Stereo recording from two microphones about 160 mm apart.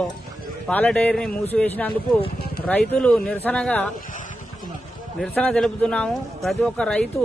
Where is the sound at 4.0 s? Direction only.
55° left (ahead or behind).